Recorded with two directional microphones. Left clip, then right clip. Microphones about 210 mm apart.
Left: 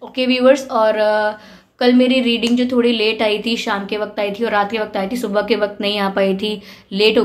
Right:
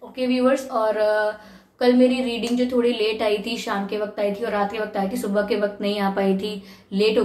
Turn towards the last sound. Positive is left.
turn(degrees=35)  # may be behind; listen again after turning